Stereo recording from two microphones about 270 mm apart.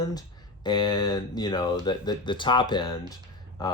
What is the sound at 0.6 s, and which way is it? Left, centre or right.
Speech, centre.